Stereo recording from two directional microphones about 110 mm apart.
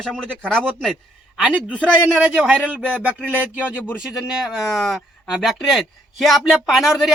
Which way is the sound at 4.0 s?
5° right (ahead or behind).